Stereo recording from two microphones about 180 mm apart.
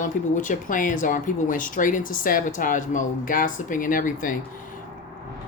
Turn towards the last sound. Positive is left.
turn(degrees=50)  # may be behind; listen again after turning